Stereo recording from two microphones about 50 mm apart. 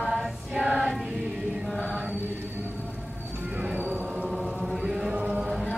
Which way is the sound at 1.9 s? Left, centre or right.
Centre.